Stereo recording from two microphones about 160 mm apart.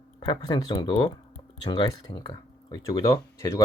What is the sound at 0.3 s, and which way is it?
Speech, 25° left (ahead or behind).